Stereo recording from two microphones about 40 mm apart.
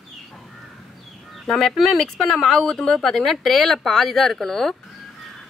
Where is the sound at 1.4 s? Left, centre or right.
Centre.